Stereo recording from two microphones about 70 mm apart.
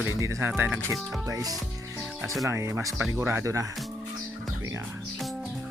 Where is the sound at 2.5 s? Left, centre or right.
Right.